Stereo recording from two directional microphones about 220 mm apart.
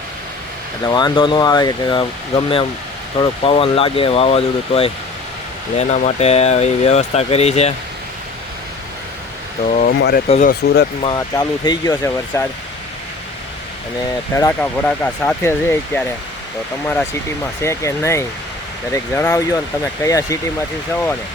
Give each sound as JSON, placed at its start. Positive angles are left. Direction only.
{"t": 0.9, "sound": "speech", "side_deg": 20}
{"t": 9.6, "sound": "speech", "side_deg": 35}
{"t": 10.2, "sound": "speech", "side_deg": 30}
{"t": 10.5, "sound": "speech", "side_deg": 45}
{"t": 11.0, "sound": "speech", "side_deg": 20}
{"t": 14.3, "sound": "speech", "side_deg": 10}